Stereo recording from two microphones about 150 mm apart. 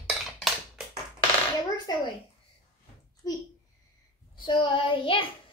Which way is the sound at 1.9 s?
25° left (ahead or behind).